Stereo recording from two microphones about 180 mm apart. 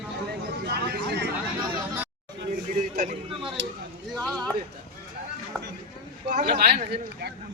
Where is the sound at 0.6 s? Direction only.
70° right (ahead or behind).